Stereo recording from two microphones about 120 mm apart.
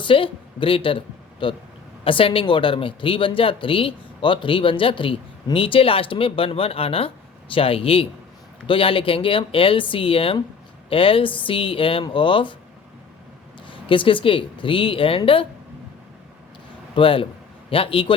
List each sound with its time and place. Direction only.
0.0 s a woman's voice: 45° left (ahead or behind)
13.7 s speech: 45° left (ahead or behind)
16.9 s a man's voice: 45° left (ahead or behind)